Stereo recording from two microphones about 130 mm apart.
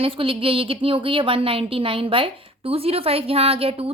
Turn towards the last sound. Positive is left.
turn(degrees=-45)  # may be behind; listen again after turning